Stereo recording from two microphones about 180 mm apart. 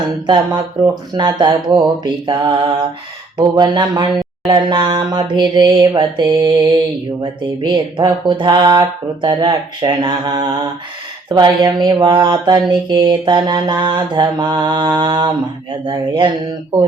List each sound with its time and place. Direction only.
1.1 s mantra: 25° right (ahead or behind)